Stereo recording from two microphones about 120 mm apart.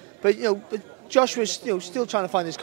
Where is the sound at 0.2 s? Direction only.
25° right (ahead or behind).